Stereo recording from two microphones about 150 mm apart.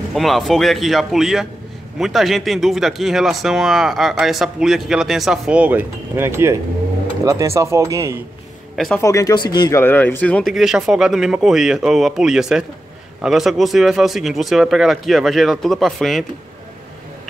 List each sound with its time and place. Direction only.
0.1 s speech: centre (ahead or behind); by 8.2 s 20° right (ahead or behind)
8.7 s speech: centre (ahead or behind)
9.0 s speech: 20° left (ahead or behind)
9.8 s speech: 15° left (ahead or behind)
10.5 s speech: 5° right (ahead or behind)